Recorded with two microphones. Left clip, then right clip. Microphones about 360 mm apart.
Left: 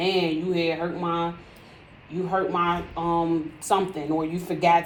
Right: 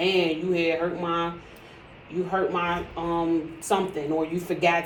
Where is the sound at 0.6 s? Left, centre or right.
Centre.